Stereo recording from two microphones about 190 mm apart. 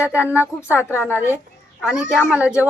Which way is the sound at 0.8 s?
15° left (ahead or behind).